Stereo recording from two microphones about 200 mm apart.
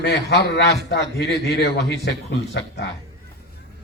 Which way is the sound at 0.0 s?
60° left (ahead or behind).